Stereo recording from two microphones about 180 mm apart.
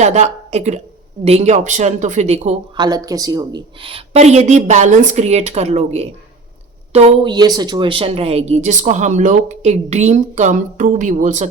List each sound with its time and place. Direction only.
0.0 s a woman's voice: 40° right (ahead or behind)
2.7 s speech: 20° right (ahead or behind); by 11.4 s 40° right (ahead or behind)